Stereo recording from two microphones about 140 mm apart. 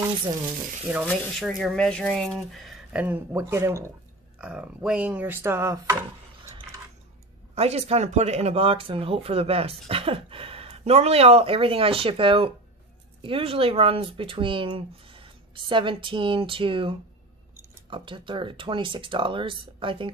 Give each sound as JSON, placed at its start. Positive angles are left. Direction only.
{"t": 0.9, "sound": "speech", "side_deg": -10}
{"t": 3.3, "sound": "speech", "side_deg": -20}
{"t": 4.4, "sound": "speech", "side_deg": -10}
{"t": 7.5, "sound": "speech", "side_deg": -50}